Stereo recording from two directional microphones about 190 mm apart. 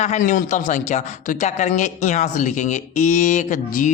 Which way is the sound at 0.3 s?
40° left (ahead or behind).